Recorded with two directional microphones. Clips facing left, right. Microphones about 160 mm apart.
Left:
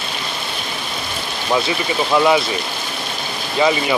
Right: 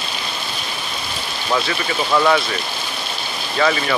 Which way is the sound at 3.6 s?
15° left (ahead or behind).